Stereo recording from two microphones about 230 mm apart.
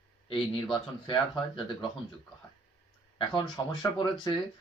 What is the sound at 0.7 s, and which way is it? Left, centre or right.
Speech, left.